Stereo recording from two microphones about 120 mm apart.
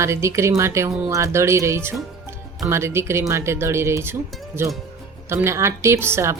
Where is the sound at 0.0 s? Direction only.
25° right (ahead or behind).